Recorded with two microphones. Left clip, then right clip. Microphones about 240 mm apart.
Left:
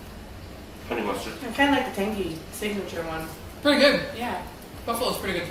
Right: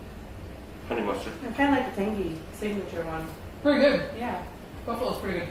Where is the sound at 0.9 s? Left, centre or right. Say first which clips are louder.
Left 1 dB; centre.